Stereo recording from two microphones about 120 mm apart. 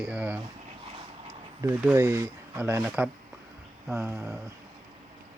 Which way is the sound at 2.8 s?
10° right (ahead or behind).